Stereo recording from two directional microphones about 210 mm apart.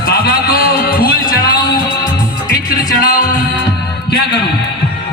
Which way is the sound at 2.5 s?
45° left (ahead or behind).